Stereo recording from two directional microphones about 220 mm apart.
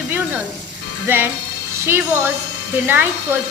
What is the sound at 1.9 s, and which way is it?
A woman's voice, 10° right (ahead or behind).